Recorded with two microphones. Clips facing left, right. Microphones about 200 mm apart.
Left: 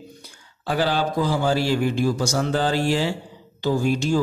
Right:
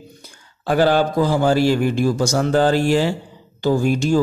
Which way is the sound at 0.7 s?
50° right (ahead or behind).